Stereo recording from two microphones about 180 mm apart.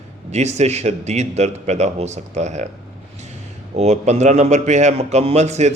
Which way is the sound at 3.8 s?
40° right (ahead or behind).